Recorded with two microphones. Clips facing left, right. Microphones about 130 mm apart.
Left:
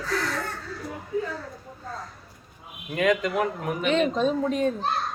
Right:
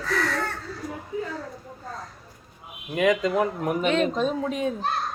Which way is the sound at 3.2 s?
25° right (ahead or behind).